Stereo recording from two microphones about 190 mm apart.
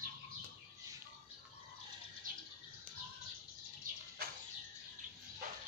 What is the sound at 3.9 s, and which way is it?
Bird, 45° right (ahead or behind).